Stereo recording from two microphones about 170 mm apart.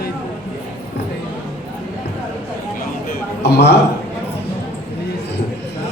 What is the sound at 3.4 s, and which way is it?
Speech, 75° left (ahead or behind).